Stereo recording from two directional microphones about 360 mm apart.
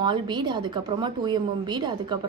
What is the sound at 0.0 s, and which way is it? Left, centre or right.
A woman's voice, centre.